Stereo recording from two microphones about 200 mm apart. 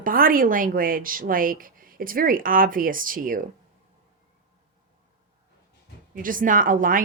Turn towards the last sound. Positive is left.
turn(degrees=-45)  # may be behind; listen again after turning